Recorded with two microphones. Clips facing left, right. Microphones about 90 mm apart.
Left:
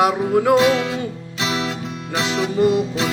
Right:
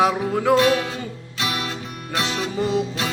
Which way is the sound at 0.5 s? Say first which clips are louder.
Even; 20° left (ahead or behind).